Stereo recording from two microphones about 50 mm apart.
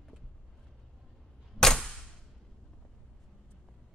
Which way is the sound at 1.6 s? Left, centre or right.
Centre.